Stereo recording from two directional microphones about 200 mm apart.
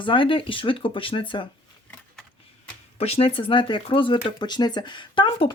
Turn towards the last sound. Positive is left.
turn(degrees=25)  # may be behind; listen again after turning